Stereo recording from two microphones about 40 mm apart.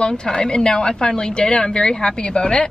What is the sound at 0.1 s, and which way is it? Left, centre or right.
Speech, centre.